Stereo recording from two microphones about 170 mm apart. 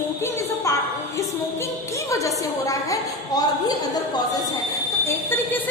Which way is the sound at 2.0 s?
20° left (ahead or behind).